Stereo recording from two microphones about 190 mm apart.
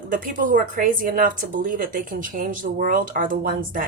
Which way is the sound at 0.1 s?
45° right (ahead or behind).